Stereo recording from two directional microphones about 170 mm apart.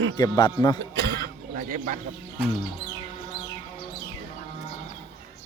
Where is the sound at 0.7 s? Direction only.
75° right (ahead or behind); by 1.9 s 50° right (ahead or behind).